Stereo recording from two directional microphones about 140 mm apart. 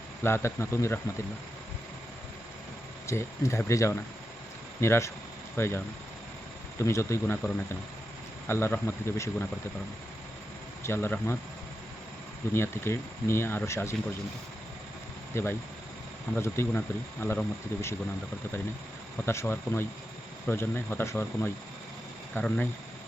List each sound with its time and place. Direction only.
0.2 s speech: 15° left (ahead or behind)
3.1 s speech: 20° left (ahead or behind)
6.8 s speech: 20° left (ahead or behind)
8.4 s speech: 20° left (ahead or behind)
10.8 s speech: 15° left (ahead or behind)
12.5 s speech: 15° left (ahead or behind)
15.3 s speech: 20° left (ahead or behind)
19.2 s speech: 20° left (ahead or behind)